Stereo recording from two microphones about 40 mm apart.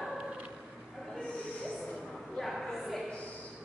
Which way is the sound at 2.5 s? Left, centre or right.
Centre.